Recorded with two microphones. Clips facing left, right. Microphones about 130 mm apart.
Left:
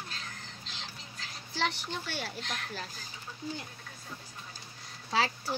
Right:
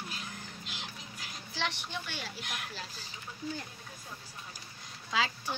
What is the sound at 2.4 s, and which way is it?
Speech, 10° right (ahead or behind).